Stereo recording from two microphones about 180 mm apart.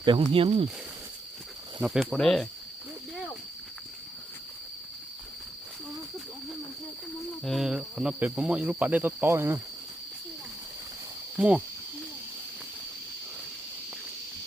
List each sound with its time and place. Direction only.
0.0 s speech: 25° right (ahead or behind)
1.8 s speech: centre (ahead or behind)
7.4 s speech: centre (ahead or behind)
11.3 s speech: 5° right (ahead or behind)